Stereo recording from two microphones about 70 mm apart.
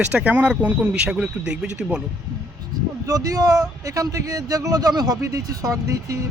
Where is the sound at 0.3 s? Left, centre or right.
Centre.